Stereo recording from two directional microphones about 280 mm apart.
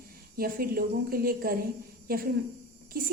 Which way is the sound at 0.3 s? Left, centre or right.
Right.